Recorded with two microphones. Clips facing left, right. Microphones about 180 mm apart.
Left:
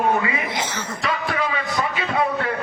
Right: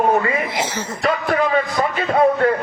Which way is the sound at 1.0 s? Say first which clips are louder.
Right 6 dB; 50° right (ahead or behind).